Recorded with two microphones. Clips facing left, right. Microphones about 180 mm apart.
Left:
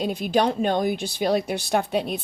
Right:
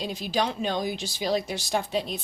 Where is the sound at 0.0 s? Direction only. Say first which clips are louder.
Left 6 dB; 55° left (ahead or behind).